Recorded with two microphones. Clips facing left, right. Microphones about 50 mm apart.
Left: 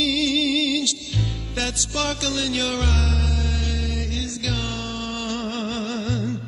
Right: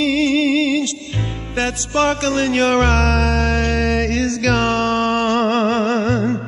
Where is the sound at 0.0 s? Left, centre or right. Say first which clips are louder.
Right 6 dB; right.